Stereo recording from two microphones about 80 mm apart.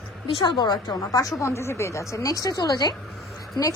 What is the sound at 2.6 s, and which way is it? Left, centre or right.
Speech, left.